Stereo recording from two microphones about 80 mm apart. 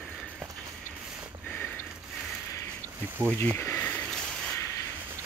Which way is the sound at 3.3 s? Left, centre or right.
Left.